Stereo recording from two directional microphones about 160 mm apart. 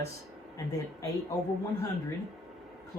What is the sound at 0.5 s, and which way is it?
Speech, 20° left (ahead or behind).